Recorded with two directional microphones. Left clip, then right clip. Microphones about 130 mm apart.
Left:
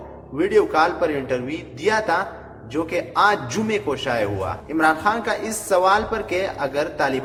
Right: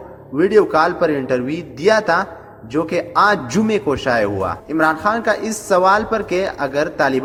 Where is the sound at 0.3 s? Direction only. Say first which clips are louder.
Right 4 dB; 40° right (ahead or behind).